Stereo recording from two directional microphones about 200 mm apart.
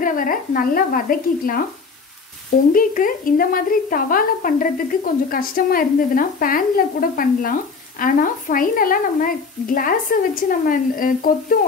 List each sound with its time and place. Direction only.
0.0 s a woman's voice: 45° left (ahead or behind)
2.7 s a woman's voice: 45° left (ahead or behind)